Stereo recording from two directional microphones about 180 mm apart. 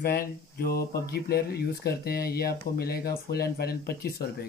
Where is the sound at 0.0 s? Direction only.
60° left (ahead or behind).